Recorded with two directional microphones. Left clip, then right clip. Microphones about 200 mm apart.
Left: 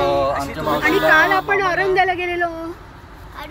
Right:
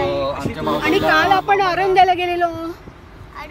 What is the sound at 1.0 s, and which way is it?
Speech, 20° right (ahead or behind).